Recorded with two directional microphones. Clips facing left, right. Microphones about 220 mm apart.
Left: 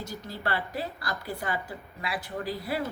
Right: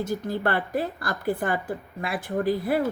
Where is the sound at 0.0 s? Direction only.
50° right (ahead or behind).